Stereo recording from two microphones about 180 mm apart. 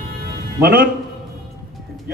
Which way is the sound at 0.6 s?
55° right (ahead or behind).